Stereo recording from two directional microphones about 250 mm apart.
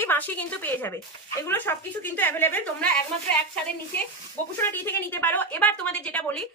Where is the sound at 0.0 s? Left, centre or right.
Centre.